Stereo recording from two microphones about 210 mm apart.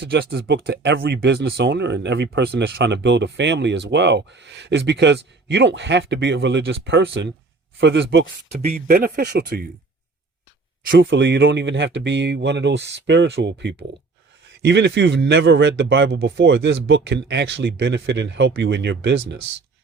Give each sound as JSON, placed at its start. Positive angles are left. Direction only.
{"t": 0.0, "sound": "speech", "side_deg": -50}
{"t": 8.7, "sound": "speech", "side_deg": -45}
{"t": 10.9, "sound": "speech", "side_deg": -55}